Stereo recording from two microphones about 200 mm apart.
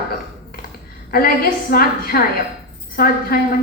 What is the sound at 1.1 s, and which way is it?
A woman's voice, 50° left (ahead or behind).